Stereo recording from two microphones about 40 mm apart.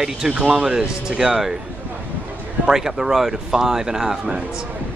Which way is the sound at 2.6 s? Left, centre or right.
Centre.